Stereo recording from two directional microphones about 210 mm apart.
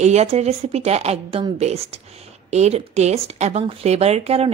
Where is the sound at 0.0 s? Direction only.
30° right (ahead or behind).